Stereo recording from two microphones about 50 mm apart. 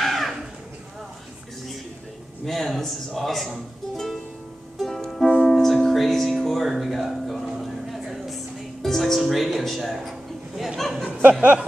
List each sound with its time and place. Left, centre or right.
0.0 s a sound: centre
2.4 s speech: centre
4.7 s music: centre
7.6 s vehicle: centre
8.8 s music: centre
10.0 s a sound: centre
11.1 s snicker: right